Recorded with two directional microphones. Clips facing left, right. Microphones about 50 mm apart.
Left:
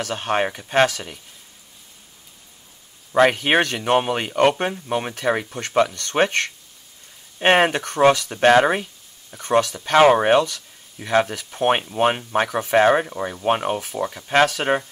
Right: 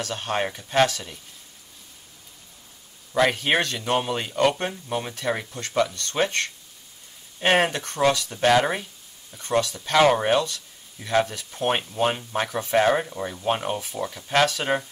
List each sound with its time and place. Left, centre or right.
0.1 s speech: left
3.3 s speech: left
13.0 s speech: left